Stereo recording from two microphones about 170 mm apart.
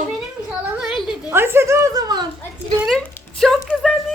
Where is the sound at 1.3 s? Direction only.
15° right (ahead or behind).